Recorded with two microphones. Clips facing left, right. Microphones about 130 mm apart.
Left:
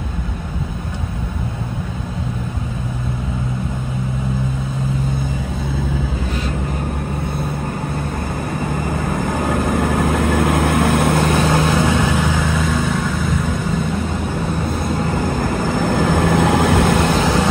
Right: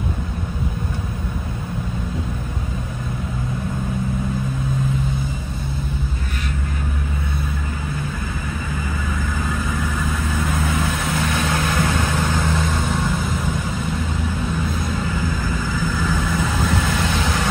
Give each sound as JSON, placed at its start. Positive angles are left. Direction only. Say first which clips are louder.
{"t": 9.2, "sound": "vehicle", "louder": "left 8 dB", "side_deg": 55}
{"t": 11.4, "sound": "vehicle", "louder": "left 6 dB", "side_deg": 30}
{"t": 12.7, "sound": "vehicle", "louder": "left 3 dB", "side_deg": 0}
{"t": 15.0, "sound": "vehicle", "louder": "left 5 dB", "side_deg": 60}